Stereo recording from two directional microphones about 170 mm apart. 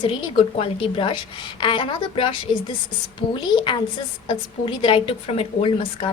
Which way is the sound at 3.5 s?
30° left (ahead or behind).